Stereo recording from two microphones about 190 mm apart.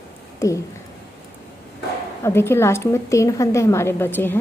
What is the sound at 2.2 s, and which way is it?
A woman's voice, 15° left (ahead or behind).